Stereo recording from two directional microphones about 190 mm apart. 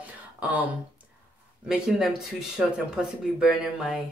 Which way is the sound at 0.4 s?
10° right (ahead or behind).